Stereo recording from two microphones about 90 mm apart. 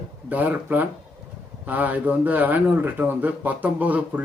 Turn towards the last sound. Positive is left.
turn(degrees=-15)  # may be behind; listen again after turning